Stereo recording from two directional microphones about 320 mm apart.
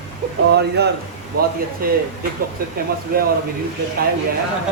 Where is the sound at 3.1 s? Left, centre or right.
Right.